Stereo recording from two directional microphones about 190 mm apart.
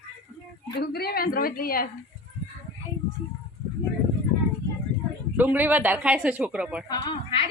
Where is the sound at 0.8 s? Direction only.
55° left (ahead or behind).